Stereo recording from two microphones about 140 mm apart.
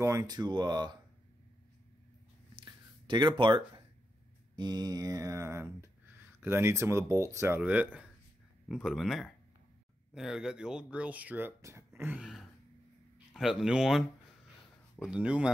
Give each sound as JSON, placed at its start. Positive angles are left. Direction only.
{"t": 0.0, "sound": "speech", "side_deg": -25}
{"t": 2.6, "sound": "a sound", "side_deg": -35}
{"t": 4.6, "sound": "speech", "side_deg": -30}
{"t": 12.2, "sound": "speech", "side_deg": -5}